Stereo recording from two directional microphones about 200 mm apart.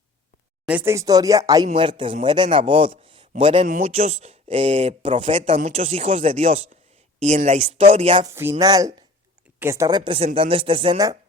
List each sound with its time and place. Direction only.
0.6 s a man's voice: 10° right (ahead or behind); by 8.3 s 30° right (ahead or behind)
8.4 s a man's voice: 15° right (ahead or behind)